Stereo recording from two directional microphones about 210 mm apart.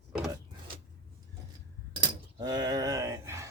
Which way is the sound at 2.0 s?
20° right (ahead or behind).